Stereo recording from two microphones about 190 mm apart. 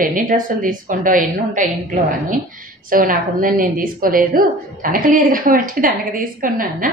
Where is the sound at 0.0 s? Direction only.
45° right (ahead or behind).